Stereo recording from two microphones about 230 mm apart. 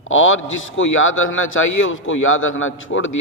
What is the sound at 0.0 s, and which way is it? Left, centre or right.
A man's voice, left.